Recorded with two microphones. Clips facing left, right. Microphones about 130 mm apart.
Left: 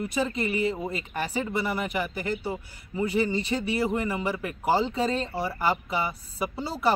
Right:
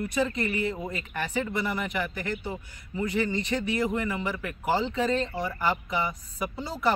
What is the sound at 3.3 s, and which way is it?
Speech, 5° left (ahead or behind).